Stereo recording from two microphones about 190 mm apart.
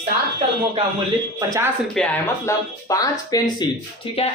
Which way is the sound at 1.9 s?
10° left (ahead or behind).